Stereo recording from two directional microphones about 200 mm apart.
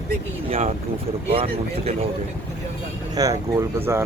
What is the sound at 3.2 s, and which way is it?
Speech, 20° right (ahead or behind).